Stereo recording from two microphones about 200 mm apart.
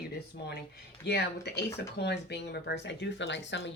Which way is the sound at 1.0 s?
55° left (ahead or behind).